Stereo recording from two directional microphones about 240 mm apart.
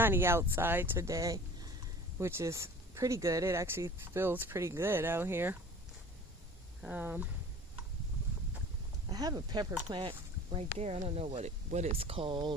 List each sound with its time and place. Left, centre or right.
0.0 s speech: centre
6.8 s speech: centre
9.0 s speech: centre